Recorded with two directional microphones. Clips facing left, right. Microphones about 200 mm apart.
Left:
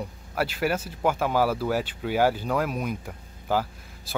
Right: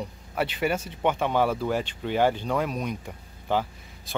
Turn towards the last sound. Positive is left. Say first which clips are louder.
# left 1 dB
turn(degrees=5)  # may be behind; listen again after turning